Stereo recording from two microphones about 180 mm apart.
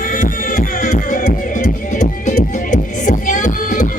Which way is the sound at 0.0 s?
50° left (ahead or behind).